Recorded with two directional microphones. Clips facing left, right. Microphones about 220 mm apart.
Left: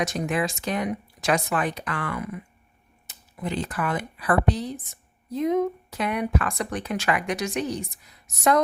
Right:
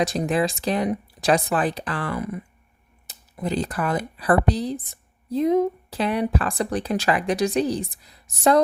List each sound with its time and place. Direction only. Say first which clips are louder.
0.0 s speech: right 4 dB; 35° right (ahead or behind)